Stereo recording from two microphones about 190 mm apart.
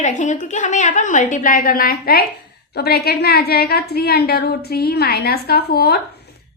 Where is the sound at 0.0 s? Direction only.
40° left (ahead or behind).